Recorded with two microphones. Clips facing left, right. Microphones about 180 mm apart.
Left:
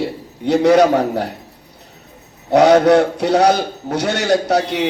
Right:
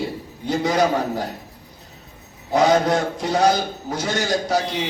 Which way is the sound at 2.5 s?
70° left (ahead or behind).